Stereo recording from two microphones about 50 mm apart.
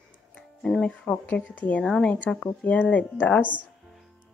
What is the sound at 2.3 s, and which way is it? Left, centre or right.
Speech, centre.